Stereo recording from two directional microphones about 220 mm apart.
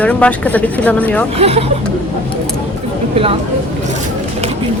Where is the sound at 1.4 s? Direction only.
25° right (ahead or behind).